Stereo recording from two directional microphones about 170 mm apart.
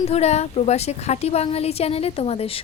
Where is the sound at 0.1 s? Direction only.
40° left (ahead or behind).